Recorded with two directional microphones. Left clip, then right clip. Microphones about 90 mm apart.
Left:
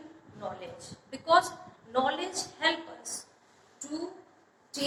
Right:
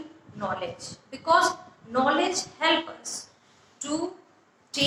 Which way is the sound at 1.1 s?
30° right (ahead or behind).